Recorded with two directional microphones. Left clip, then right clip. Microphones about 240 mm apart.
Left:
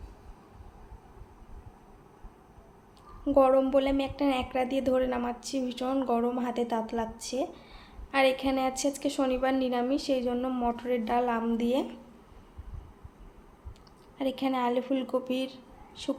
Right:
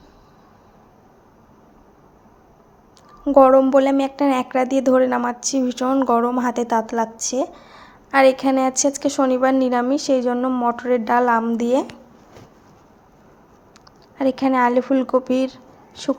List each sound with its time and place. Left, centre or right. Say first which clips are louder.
3.2 s a woman's voice: right 11 dB; right
14.2 s a woman's voice: right 12 dB; right